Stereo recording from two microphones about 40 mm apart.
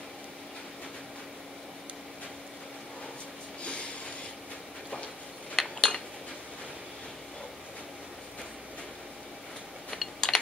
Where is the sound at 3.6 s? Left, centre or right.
Left.